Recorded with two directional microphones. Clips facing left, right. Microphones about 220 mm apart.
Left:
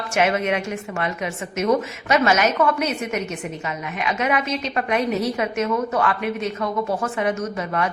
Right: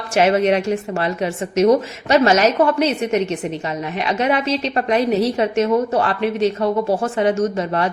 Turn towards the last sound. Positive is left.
turn(degrees=-30)  # may be behind; listen again after turning